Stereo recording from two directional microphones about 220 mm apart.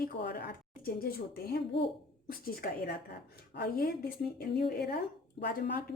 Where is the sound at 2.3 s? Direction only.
45° left (ahead or behind).